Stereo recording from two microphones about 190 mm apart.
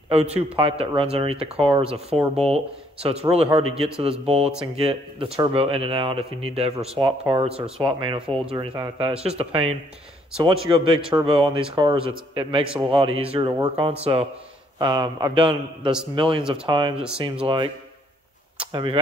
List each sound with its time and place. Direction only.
0.1 s speech: 30° right (ahead or behind)
11.1 s speech: 30° right (ahead or behind)
14.8 s speech: 20° right (ahead or behind)
16.9 s speech: 5° right (ahead or behind)
17.2 s speech: 25° right (ahead or behind)
18.7 s speech: 25° right (ahead or behind)